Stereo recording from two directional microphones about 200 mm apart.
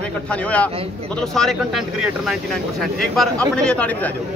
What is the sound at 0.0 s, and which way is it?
A man's voice, 5° left (ahead or behind).